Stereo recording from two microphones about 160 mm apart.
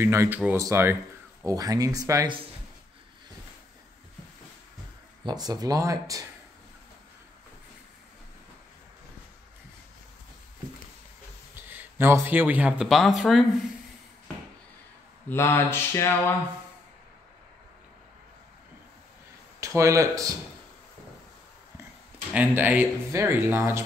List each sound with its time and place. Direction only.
0.0 s speech: 15° right (ahead or behind)
5.2 s speech: 25° right (ahead or behind)
11.7 s speech: 15° right (ahead or behind)
15.2 s speech: 15° left (ahead or behind)
19.6 s speech: 20° right (ahead or behind)
22.3 s speech: 10° right (ahead or behind)